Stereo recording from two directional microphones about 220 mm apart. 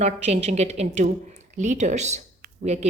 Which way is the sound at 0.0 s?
30° right (ahead or behind).